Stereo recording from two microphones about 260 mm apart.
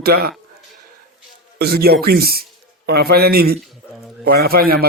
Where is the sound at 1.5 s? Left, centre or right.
Right.